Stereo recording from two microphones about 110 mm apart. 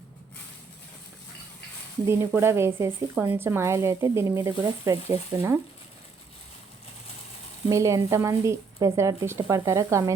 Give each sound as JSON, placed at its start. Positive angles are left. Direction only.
{"t": 2.0, "sound": "speech", "side_deg": -25}
{"t": 7.7, "sound": "speech", "side_deg": -30}